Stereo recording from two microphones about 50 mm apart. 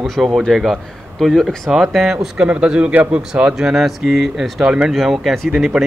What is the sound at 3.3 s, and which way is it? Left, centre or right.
Speech, centre.